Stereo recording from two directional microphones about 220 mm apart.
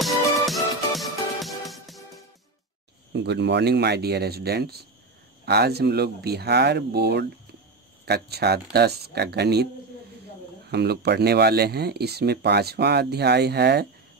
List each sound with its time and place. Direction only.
0.0 s music: centre (ahead or behind)
3.1 s speech: 50° right (ahead or behind)
10.7 s speech: 45° right (ahead or behind)